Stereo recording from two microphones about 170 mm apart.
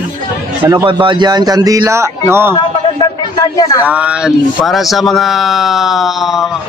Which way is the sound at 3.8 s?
5° right (ahead or behind).